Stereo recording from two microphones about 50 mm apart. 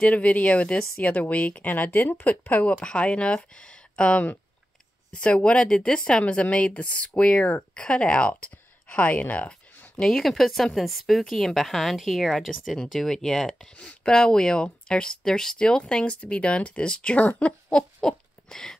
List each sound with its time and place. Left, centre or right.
0.0 s speech: left
2.8 s speech: left
9.9 s speech: centre